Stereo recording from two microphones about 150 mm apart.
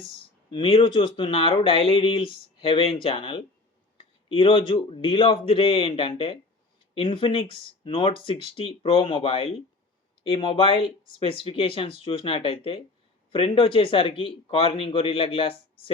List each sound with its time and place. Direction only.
0.5 s a man's voice: 35° left (ahead or behind)